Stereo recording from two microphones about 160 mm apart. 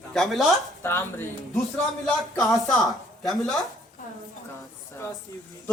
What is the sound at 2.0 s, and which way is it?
Speech, centre (ahead or behind).